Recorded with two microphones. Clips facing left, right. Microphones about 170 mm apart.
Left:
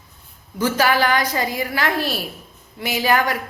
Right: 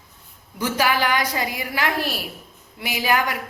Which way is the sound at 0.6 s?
15° right (ahead or behind).